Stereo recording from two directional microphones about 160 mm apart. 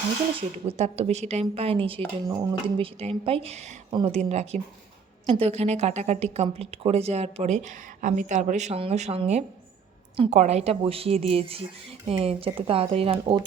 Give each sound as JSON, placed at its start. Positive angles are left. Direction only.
{"t": 0.3, "sound": "a woman's voice", "side_deg": -40}
{"t": 2.2, "sound": "speech", "side_deg": -25}
{"t": 2.7, "sound": "a woman's voice", "side_deg": -35}